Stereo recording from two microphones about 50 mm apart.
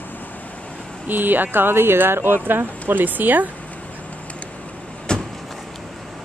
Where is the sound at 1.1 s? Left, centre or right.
Right.